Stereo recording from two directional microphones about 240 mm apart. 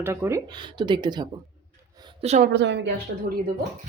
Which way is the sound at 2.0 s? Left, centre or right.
Right.